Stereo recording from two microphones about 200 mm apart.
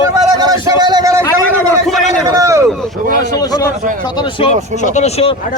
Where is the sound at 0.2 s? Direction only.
20° right (ahead or behind).